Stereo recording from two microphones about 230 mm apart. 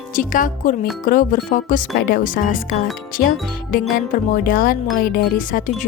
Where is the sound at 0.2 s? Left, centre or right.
Left.